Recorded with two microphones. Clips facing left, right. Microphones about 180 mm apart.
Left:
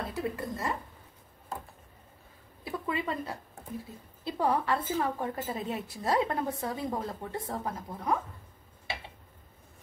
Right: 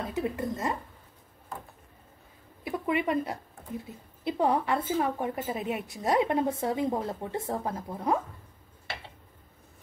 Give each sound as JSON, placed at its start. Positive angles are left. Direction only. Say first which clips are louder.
{"t": 0.1, "sound": "a woman's voice", "louder": "right 3 dB", "side_deg": -20}
{"t": 2.6, "sound": "a sound", "louder": "right 5 dB", "side_deg": -20}
{"t": 4.2, "sound": "a woman's voice", "louder": "right 3 dB", "side_deg": -20}